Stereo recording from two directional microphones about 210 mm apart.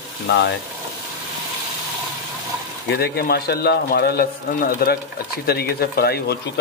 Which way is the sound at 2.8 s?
50° left (ahead or behind).